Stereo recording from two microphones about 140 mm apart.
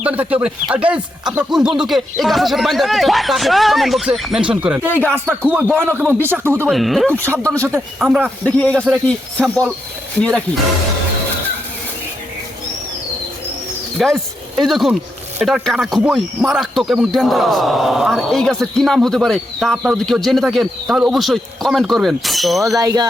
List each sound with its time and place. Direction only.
0.0 s speech: 10° right (ahead or behind)
6.7 s speech: centre (ahead or behind)
7.1 s speech: 15° right (ahead or behind)
8.4 s speech: 10° left (ahead or behind)
14.0 s a sound: centre (ahead or behind)
14.7 s speech: centre (ahead or behind)
22.8 s speech: 25° right (ahead or behind)